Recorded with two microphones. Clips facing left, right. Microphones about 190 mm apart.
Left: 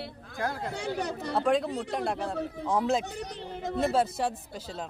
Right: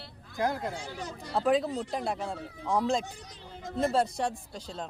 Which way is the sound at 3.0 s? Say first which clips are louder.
Left 9 dB; 70° left (ahead or behind).